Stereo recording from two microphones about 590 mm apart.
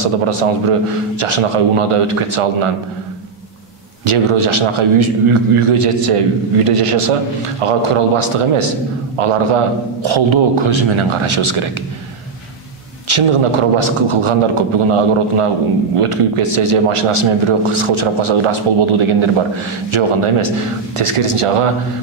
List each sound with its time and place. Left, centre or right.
0.0 s a man's voice: right
4.0 s a man's voice: right
13.1 s a man's voice: right